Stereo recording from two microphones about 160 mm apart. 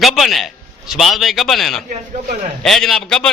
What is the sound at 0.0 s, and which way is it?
A man's voice, centre (ahead or behind).